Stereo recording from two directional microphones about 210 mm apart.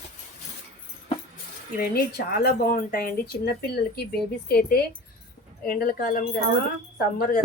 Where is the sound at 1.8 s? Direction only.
50° left (ahead or behind).